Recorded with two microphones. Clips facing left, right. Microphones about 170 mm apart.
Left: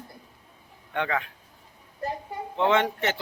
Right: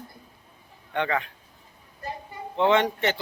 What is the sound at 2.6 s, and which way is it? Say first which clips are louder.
Speech: right 2 dB; centre (ahead or behind).